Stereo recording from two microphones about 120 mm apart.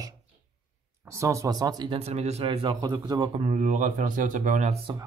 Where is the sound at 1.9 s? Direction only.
60° right (ahead or behind).